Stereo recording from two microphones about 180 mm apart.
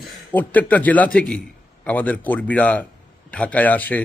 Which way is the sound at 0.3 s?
10° left (ahead or behind).